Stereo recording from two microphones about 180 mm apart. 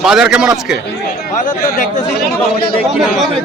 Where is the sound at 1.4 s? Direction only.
45° left (ahead or behind).